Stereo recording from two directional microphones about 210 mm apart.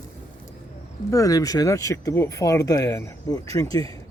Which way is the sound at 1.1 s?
15° left (ahead or behind).